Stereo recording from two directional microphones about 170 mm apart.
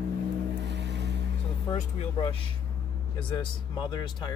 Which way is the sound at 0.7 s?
90° right.